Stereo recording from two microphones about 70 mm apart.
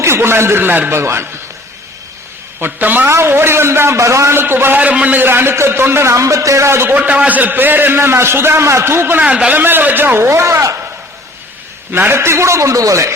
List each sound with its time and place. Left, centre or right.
0.0 s a man's voice: right
0.9 s a man's voice: right
2.6 s speech: right
3.1 s a man's voice: right
6.9 s a man's voice: right
9.2 s speech: centre
10.2 s a man's voice: right
11.9 s a man's voice: right